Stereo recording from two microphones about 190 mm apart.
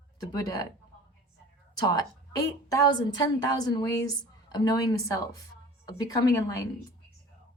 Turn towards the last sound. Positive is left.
turn(degrees=15)  # may be behind; listen again after turning